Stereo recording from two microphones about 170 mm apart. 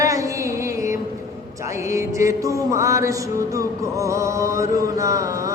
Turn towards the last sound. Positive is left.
turn(degrees=-20)  # may be behind; listen again after turning